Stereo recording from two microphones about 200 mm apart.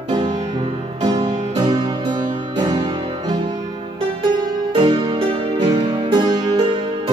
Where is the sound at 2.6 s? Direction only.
20° right (ahead or behind).